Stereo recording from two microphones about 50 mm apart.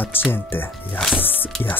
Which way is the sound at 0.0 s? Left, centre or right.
Left.